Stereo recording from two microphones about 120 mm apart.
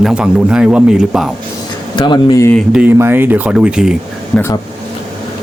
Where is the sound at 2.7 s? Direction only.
15° right (ahead or behind).